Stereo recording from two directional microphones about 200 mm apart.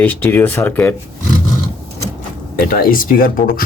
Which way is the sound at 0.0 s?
10° left (ahead or behind).